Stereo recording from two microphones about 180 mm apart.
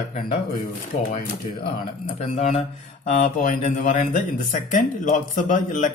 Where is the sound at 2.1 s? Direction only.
40° left (ahead or behind).